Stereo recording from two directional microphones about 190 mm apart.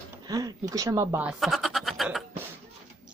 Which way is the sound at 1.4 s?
Centre (ahead or behind).